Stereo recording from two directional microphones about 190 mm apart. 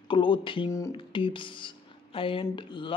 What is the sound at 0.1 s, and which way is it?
Speech, 25° left (ahead or behind).